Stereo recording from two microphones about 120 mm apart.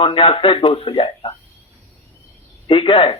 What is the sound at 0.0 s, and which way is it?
A man's voice, 50° left (ahead or behind).